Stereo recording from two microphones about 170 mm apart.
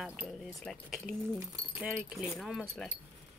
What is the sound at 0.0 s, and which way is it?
Speech, centre (ahead or behind).